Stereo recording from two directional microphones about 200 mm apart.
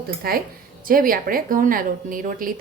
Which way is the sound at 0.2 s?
50° right (ahead or behind).